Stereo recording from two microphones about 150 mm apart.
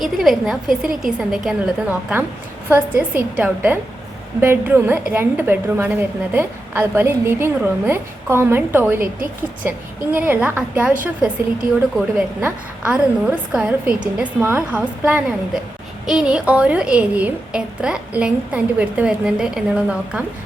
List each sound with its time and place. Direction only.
0.0 s a woman's voice: centre (ahead or behind)
12.4 s a woman's voice: 10° right (ahead or behind)